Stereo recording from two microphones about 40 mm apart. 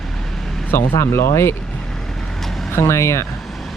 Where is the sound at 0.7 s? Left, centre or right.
Left.